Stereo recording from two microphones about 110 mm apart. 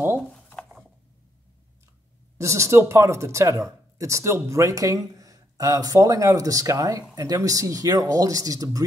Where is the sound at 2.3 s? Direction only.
25° right (ahead or behind).